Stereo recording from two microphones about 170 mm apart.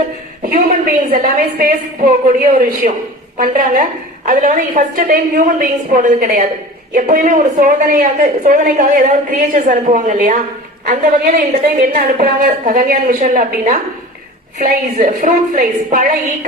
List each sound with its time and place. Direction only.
1.1 s a woman's voice: 55° right (ahead or behind)